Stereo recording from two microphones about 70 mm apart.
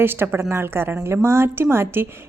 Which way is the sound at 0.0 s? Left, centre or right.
Right.